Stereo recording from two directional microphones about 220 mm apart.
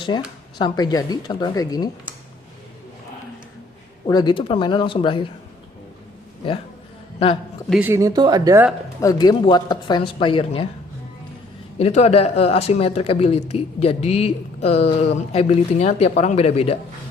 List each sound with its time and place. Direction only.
0.1 s speech: 20° left (ahead or behind)
4.0 s speech: 20° left (ahead or behind)
7.7 s speech: 10° right (ahead or behind)
9.0 s speech: 15° left (ahead or behind)
11.8 s speech: 30° left (ahead or behind)